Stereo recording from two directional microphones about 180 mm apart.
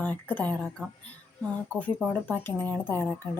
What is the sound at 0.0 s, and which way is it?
Speech, 10° left (ahead or behind).